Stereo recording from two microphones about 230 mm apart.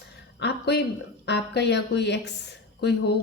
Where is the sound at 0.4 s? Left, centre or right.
Left.